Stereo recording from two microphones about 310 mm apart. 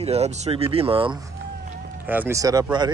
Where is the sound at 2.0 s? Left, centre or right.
Centre.